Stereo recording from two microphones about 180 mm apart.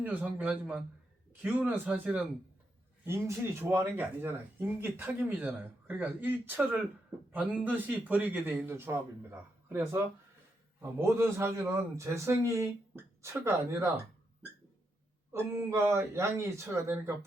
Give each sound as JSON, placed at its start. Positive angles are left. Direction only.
{"t": 0.0, "sound": "speech", "side_deg": -10}
{"t": 15.3, "sound": "speech", "side_deg": -15}